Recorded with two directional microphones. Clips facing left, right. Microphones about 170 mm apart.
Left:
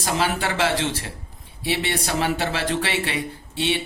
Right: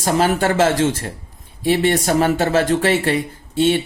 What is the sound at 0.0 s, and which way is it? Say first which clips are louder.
Speech: right 7 dB; 45° right (ahead or behind).